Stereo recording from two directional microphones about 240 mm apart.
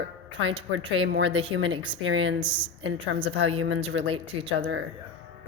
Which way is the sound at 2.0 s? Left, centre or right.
Right.